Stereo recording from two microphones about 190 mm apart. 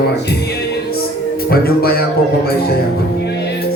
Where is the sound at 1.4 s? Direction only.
55° left (ahead or behind).